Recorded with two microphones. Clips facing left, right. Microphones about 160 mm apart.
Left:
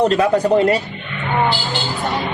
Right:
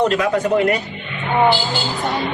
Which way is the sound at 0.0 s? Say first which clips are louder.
Left 2 dB; 35° left (ahead or behind).